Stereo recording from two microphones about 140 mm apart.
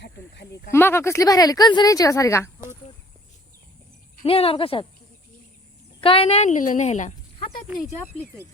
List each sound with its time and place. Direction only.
0.7 s speech: 15° left (ahead or behind)
4.2 s speech: 40° left (ahead or behind)
6.0 s a woman's voice: 40° left (ahead or behind); by 7.1 s 55° left (ahead or behind)